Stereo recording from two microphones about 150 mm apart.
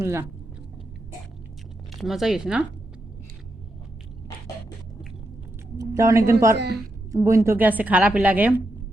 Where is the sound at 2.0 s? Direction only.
Centre (ahead or behind).